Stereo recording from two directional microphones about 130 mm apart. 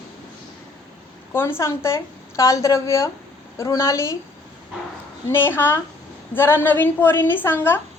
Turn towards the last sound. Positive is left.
turn(degrees=15)  # may be behind; listen again after turning